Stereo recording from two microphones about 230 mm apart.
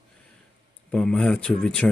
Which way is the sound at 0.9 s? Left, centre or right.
Centre.